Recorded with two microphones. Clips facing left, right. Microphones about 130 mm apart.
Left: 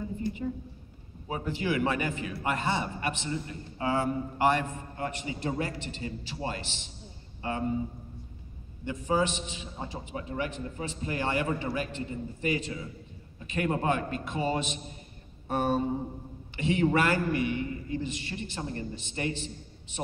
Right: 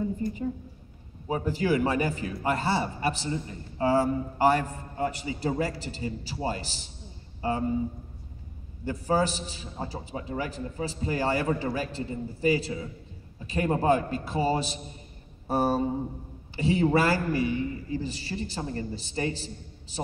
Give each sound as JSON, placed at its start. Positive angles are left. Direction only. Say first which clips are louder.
{"t": 0.2, "sound": "a man's voice", "louder": "right 2 dB", "side_deg": -35}
{"t": 8.8, "sound": "a man's voice", "louder": "right 2 dB", "side_deg": -40}
{"t": 15.4, "sound": "a sound", "louder": "right 2 dB", "side_deg": -35}
{"t": 16.5, "sound": "a man's voice", "louder": "right 2 dB", "side_deg": -35}